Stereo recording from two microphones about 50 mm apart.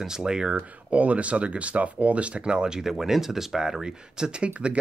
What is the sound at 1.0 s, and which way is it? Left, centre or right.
Speech, right.